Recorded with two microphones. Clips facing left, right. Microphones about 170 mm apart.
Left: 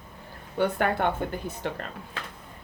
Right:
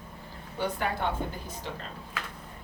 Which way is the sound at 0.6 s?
60° left (ahead or behind).